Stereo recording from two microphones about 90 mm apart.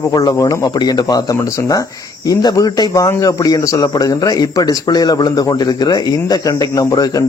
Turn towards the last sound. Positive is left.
turn(degrees=40)  # may be behind; listen again after turning